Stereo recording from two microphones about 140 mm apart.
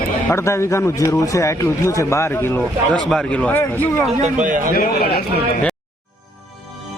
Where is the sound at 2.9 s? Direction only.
5° left (ahead or behind).